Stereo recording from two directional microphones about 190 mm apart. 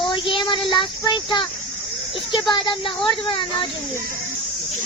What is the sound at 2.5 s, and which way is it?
Speech, 25° left (ahead or behind).